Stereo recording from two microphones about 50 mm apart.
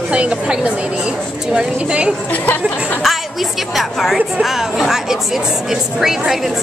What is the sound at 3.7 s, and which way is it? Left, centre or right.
A woman's voice, centre.